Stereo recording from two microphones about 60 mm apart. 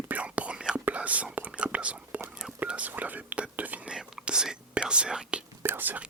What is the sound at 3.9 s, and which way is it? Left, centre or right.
Speech, centre.